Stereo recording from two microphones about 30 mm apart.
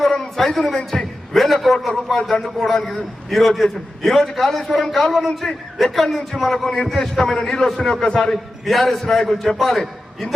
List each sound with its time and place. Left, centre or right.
0.0 s a sound: centre
1.6 s a man's voice: centre
5.4 s a man's voice: centre
8.6 s a man's voice: centre